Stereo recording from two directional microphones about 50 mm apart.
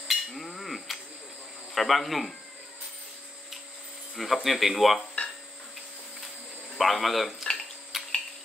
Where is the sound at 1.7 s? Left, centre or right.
Centre.